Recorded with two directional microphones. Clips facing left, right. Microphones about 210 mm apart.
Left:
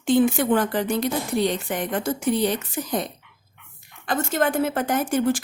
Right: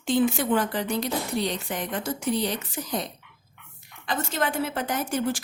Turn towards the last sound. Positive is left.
turn(degrees=55)  # may be behind; listen again after turning